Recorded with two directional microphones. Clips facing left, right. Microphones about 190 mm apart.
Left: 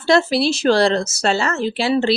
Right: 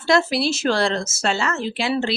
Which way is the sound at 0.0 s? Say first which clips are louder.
Left 3 dB; 30° left (ahead or behind).